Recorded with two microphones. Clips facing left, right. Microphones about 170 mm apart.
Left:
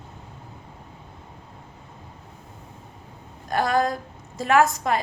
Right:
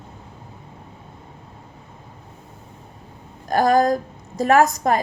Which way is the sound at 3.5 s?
40° right (ahead or behind).